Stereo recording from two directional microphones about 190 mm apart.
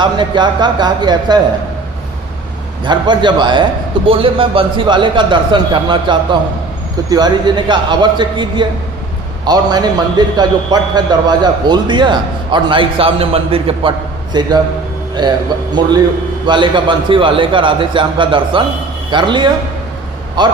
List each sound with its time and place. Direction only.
0.0 s a man's voice: 25° right (ahead or behind)
2.8 s a man's voice: 25° right (ahead or behind)
16.5 s a man's voice: 25° right (ahead or behind)